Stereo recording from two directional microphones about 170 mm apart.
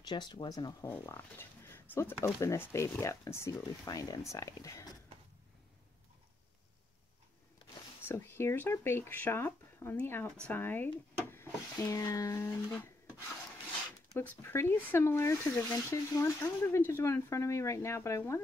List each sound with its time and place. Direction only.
0.0 s speech: 25° left (ahead or behind)
0.8 s speech: 10° left (ahead or behind)
8.1 s speech: 15° left (ahead or behind)
14.4 s speech: 15° left (ahead or behind)